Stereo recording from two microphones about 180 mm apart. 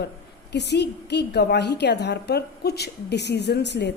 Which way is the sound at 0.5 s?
70° left (ahead or behind).